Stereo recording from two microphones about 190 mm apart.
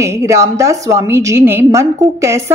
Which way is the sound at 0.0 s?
15° right (ahead or behind).